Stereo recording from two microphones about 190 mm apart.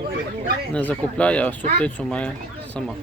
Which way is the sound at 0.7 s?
5° left (ahead or behind).